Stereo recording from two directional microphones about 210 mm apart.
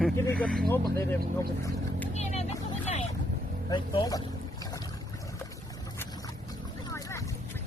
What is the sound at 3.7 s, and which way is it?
Speech, 20° left (ahead or behind).